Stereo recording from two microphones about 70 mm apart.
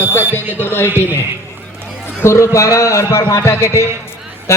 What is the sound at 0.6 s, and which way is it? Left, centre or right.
Speech, left.